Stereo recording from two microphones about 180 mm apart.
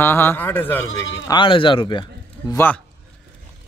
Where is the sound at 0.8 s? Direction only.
90° left.